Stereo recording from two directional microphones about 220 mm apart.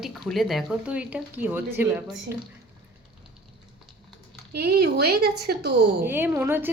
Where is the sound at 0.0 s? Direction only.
Centre (ahead or behind).